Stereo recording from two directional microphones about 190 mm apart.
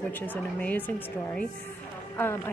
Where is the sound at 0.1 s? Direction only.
10° left (ahead or behind).